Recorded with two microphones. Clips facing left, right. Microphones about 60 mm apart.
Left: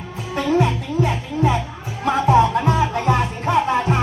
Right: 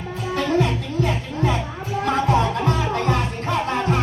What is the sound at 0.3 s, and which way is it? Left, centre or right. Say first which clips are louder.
Music: left 2 dB; centre.